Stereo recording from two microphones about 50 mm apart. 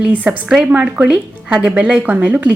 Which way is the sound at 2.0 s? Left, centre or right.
Right.